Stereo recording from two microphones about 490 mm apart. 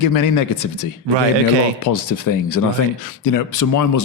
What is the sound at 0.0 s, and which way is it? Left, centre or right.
Speech, left.